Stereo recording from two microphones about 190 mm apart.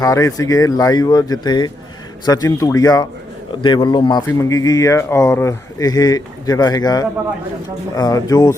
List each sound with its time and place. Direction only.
0.0 s speech: 15° left (ahead or behind)